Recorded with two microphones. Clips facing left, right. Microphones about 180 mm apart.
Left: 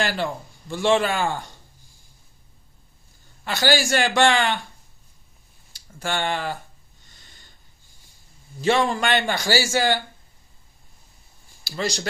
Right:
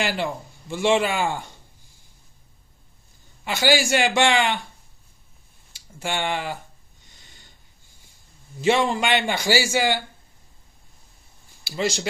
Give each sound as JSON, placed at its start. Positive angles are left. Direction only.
{"t": 0.0, "sound": "speech", "side_deg": -15}
{"t": 3.4, "sound": "a man's voice", "side_deg": -15}
{"t": 5.9, "sound": "a sound", "side_deg": -15}
{"t": 8.5, "sound": "a man's voice", "side_deg": -20}
{"t": 11.7, "sound": "speech", "side_deg": -20}